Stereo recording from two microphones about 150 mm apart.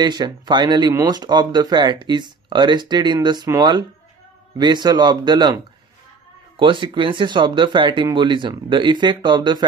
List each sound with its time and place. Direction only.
0.0 s speech: 30° right (ahead or behind)